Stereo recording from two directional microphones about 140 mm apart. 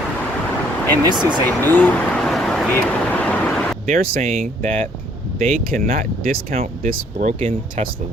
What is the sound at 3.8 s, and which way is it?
Speech, 80° right.